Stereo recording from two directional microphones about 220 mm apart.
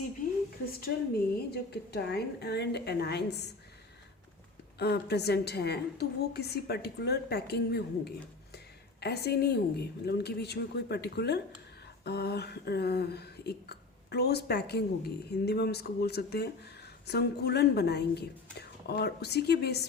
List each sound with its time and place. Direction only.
1.5 s speech: 45° left (ahead or behind)
4.8 s speech: 50° left (ahead or behind)